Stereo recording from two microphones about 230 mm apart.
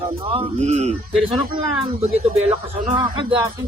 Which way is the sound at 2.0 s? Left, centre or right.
Right.